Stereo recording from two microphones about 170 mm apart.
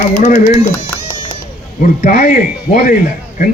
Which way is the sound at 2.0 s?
45° left (ahead or behind).